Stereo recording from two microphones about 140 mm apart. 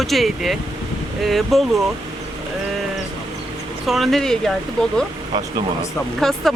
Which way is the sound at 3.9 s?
Centre (ahead or behind).